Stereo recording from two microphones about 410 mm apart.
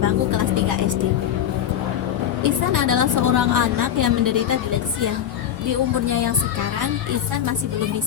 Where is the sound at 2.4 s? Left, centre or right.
Right.